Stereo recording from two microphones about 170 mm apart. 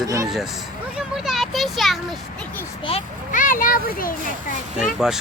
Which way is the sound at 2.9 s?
35° left (ahead or behind).